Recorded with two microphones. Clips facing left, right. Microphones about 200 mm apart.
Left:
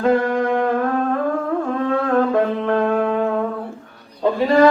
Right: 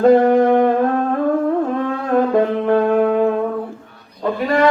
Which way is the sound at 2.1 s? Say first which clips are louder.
Right 5 dB; 20° right (ahead or behind).